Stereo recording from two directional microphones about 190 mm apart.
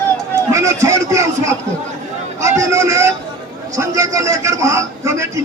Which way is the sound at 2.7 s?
15° right (ahead or behind).